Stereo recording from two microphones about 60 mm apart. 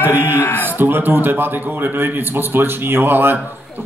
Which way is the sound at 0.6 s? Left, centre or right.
Right.